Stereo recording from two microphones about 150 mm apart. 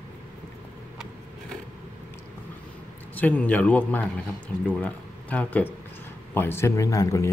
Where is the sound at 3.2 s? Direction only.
10° left (ahead or behind).